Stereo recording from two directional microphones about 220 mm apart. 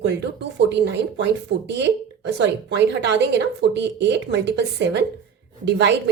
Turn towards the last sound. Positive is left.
turn(degrees=-50)  # may be behind; listen again after turning